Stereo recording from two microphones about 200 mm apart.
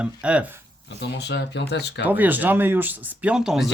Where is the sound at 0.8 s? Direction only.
55° left (ahead or behind).